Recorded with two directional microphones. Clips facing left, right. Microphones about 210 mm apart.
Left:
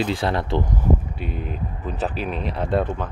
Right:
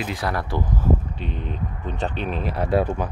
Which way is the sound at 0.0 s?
30° left (ahead or behind).